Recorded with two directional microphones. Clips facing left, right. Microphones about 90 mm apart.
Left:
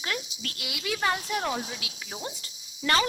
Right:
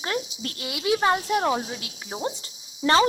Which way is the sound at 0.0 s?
30° right (ahead or behind).